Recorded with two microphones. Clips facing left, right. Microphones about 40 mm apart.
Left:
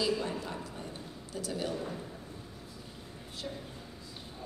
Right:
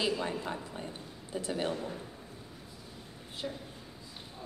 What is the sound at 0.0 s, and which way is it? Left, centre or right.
A woman's voice, right.